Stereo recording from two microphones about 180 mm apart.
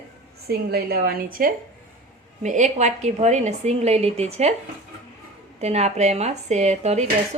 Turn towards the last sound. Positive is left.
turn(degrees=-40)  # may be behind; listen again after turning